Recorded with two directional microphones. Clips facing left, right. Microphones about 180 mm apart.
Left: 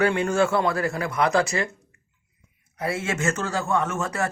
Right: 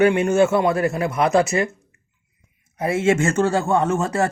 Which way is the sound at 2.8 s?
25° right (ahead or behind).